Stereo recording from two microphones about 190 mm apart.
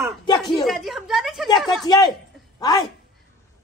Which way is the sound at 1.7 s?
20° left (ahead or behind).